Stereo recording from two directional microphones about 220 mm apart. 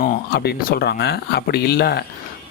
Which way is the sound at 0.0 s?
45° left (ahead or behind).